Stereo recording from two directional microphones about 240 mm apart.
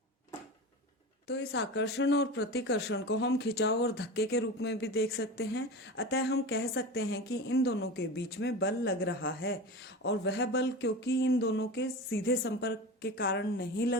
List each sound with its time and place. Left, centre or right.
1.3 s speech: left